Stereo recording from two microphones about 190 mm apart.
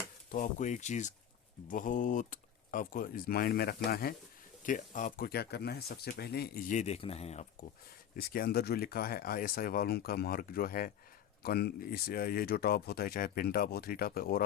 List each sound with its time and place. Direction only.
0.3 s speech: 45° left (ahead or behind)
4.6 s speech: 45° left (ahead or behind)
6.7 s speech: 35° left (ahead or behind)
8.1 s speech: 50° left (ahead or behind)